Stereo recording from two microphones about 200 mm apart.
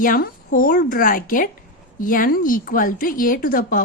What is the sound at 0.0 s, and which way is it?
Speech, 45° left (ahead or behind).